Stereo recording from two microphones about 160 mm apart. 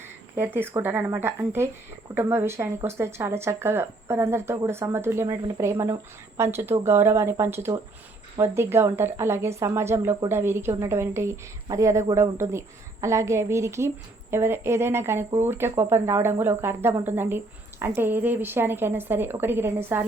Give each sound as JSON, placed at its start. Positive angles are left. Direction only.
{"t": 0.3, "sound": "a woman's voice", "side_deg": -15}